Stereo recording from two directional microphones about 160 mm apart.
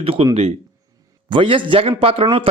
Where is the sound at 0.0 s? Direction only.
35° right (ahead or behind).